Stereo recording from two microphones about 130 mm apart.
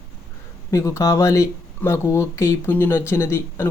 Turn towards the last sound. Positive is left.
turn(degrees=20)  # may be behind; listen again after turning